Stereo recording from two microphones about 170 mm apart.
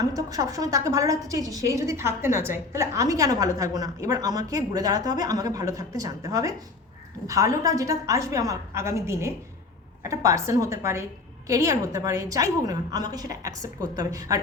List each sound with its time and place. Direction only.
0.0 s a woman's voice: 20° right (ahead or behind)